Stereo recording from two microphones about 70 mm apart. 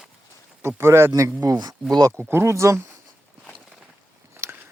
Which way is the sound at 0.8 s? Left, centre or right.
Right.